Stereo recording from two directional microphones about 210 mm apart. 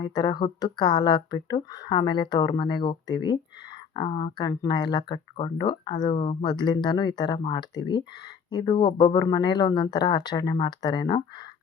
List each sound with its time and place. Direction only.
0.0 s speech: 20° left (ahead or behind)